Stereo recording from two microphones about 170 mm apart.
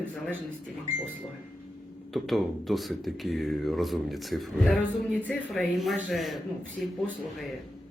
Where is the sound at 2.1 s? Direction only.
Centre (ahead or behind).